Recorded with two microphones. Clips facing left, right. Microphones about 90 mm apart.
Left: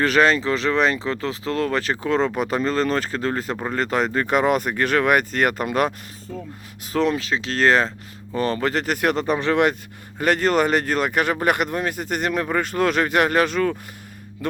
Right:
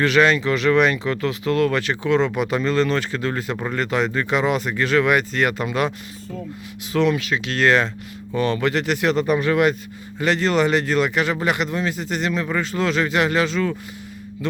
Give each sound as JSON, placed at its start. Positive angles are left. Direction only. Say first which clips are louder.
{"t": 0.0, "sound": "speech", "louder": "right 1 dB", "side_deg": 40}
{"t": 6.9, "sound": "speech", "louder": "right 1 dB", "side_deg": 35}
{"t": 9.1, "sound": "speech", "louder": "right 2 dB", "side_deg": 30}
{"t": 10.2, "sound": "speech", "louder": "even", "side_deg": 50}